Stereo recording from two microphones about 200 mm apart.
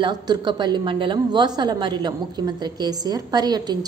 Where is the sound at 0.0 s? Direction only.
20° right (ahead or behind).